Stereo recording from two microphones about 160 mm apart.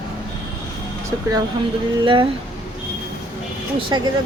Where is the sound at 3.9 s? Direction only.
30° right (ahead or behind).